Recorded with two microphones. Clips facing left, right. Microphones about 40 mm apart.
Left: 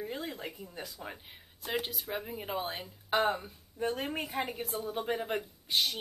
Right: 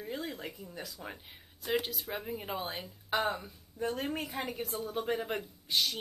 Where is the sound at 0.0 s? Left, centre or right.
Centre.